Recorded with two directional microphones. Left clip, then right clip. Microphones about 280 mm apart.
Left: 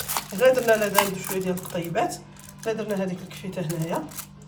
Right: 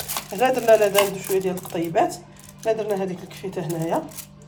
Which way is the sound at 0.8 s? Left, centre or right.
Centre.